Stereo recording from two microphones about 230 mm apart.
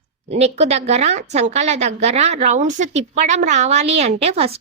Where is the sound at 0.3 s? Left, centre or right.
Right.